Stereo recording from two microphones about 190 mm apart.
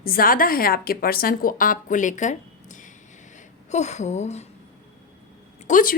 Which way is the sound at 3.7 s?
35° left (ahead or behind).